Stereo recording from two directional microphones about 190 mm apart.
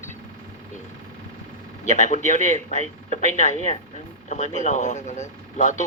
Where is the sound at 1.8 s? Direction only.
40° left (ahead or behind).